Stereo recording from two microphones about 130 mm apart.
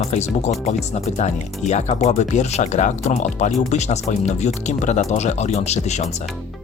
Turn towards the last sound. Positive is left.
turn(degrees=60)  # may be behind; listen again after turning